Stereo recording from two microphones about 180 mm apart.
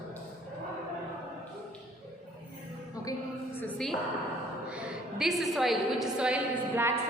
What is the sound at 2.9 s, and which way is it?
Music, 20° left (ahead or behind).